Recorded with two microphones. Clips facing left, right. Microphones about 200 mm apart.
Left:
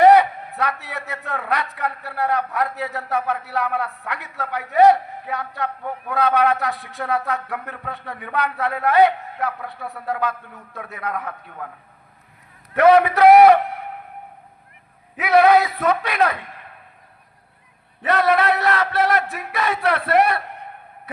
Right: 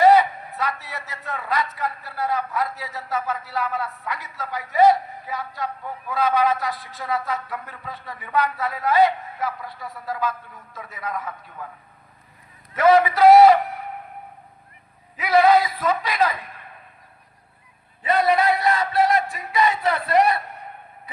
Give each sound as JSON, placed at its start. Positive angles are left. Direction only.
{"t": 0.0, "sound": "a man's voice", "side_deg": 65}
{"t": 12.7, "sound": "a sound", "side_deg": 65}
{"t": 15.1, "sound": "a man's voice", "side_deg": 65}
{"t": 18.0, "sound": "a man's voice", "side_deg": 75}